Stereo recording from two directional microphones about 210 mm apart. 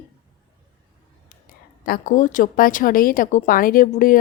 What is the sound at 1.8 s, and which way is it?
A woman's voice, 40° left (ahead or behind).